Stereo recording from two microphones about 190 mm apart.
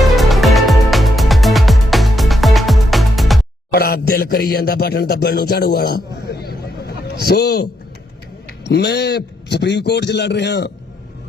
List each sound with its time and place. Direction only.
0.0 s music: centre (ahead or behind)
3.7 s a man's voice: 50° left (ahead or behind)